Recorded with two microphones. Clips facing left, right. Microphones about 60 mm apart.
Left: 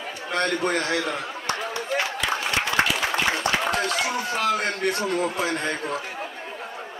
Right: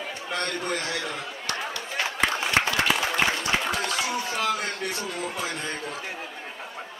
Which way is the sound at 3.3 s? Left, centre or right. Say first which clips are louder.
Left 3 dB; left.